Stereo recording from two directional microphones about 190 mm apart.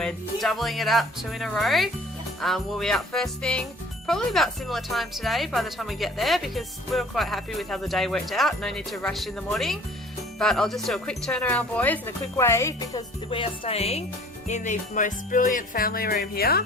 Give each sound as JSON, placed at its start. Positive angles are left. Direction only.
{"t": 0.0, "sound": "music", "side_deg": 0}
{"t": 13.3, "sound": "music", "side_deg": 30}